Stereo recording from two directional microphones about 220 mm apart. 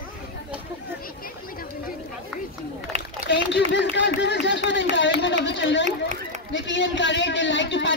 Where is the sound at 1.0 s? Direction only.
40° left (ahead or behind).